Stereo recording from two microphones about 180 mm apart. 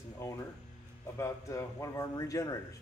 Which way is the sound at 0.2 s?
15° left (ahead or behind).